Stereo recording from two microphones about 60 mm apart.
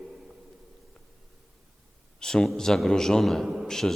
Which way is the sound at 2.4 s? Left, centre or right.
Centre.